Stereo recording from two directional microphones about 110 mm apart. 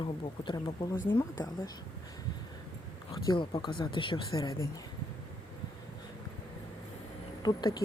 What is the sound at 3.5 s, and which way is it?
Speech, 50° left (ahead or behind).